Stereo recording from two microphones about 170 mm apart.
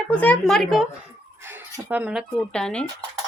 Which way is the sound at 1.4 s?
15° right (ahead or behind).